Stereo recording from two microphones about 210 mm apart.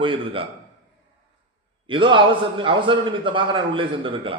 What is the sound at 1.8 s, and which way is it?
A man's voice, 25° right (ahead or behind).